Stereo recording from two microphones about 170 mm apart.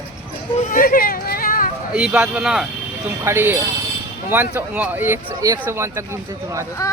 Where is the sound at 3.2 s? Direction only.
15° right (ahead or behind).